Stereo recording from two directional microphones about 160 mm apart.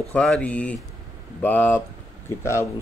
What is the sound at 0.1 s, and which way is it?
Speech, 5° left (ahead or behind).